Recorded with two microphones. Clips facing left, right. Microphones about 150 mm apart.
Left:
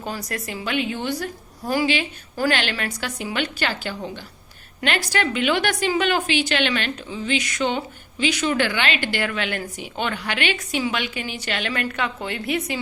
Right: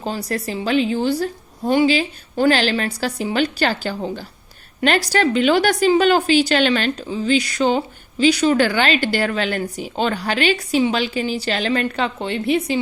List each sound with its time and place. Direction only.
0.0 s a woman's voice: 30° right (ahead or behind)